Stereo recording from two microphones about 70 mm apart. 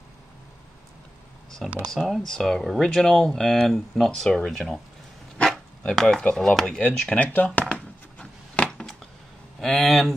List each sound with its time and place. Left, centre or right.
1.9 s speech: centre; by 7.6 s left
7.7 s a sound: centre
9.6 s speech: centre